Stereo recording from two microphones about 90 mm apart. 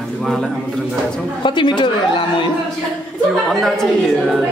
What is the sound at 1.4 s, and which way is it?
Speech, 60° left (ahead or behind).